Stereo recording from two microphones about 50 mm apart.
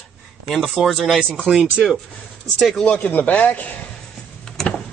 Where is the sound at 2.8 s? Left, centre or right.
Left.